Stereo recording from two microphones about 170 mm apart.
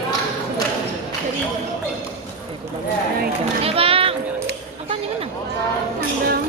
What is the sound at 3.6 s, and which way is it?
Children playing, 35° right (ahead or behind).